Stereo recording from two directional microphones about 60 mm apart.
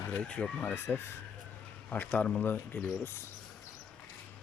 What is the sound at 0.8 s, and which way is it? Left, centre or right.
Speech, left.